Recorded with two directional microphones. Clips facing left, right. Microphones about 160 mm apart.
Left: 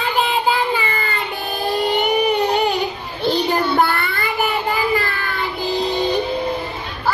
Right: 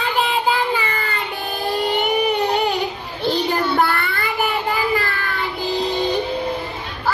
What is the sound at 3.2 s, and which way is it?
Child singing, 20° left (ahead or behind).